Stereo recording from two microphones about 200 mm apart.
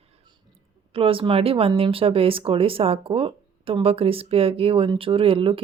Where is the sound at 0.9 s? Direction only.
25° right (ahead or behind).